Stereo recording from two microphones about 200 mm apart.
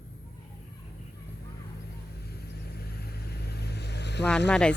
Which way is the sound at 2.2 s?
50° left (ahead or behind).